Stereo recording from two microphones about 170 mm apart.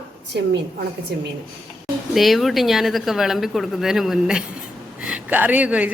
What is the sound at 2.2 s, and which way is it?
A woman's voice, centre (ahead or behind).